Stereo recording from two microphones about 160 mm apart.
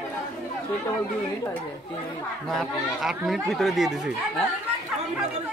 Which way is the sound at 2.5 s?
Centre (ahead or behind).